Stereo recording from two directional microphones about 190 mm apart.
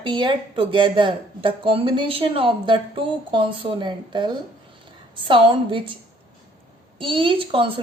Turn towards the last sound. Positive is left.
turn(degrees=-25)  # may be behind; listen again after turning